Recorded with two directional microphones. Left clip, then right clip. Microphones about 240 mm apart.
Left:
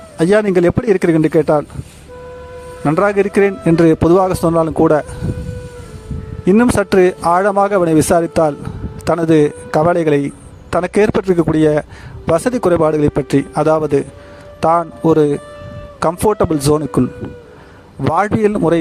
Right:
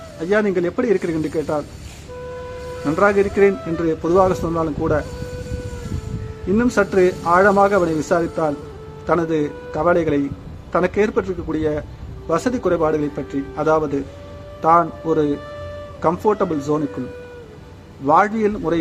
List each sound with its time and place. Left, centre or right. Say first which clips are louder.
0.2 s speech: left 7 dB; left
2.8 s speech: left 3 dB; left
6.5 s speech: left 5 dB; left
18.1 s speech: left 1 dB; left